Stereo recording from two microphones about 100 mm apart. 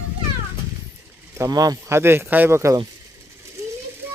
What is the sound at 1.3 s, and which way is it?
Speech, 35° right (ahead or behind).